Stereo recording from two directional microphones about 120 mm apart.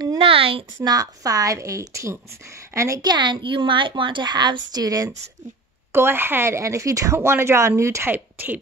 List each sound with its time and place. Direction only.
0.2 s speech: 50° right (ahead or behind)
0.8 s a woman's voice: 30° right (ahead or behind)
5.9 s speech: 20° right (ahead or behind)